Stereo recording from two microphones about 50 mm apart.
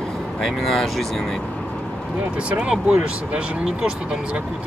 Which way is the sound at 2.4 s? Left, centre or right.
Centre.